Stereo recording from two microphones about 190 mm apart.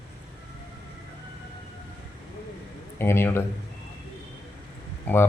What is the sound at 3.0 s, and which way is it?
Speech, 10° left (ahead or behind).